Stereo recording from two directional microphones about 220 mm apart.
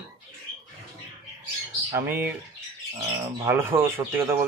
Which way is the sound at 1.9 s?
10° right (ahead or behind).